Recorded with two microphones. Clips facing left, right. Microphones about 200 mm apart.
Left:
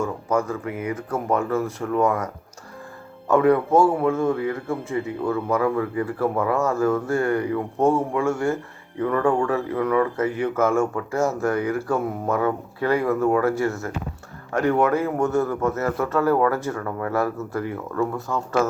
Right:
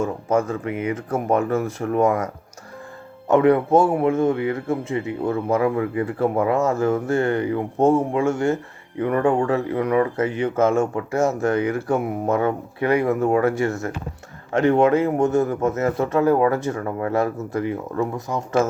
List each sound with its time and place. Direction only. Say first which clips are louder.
0.0 s a man's voice: right 2 dB; 20° right (ahead or behind)